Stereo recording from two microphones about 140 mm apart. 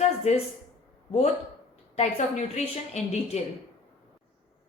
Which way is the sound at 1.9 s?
50° left (ahead or behind).